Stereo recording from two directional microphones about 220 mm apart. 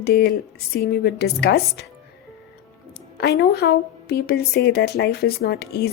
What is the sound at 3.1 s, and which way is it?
A woman's voice, 45° left (ahead or behind).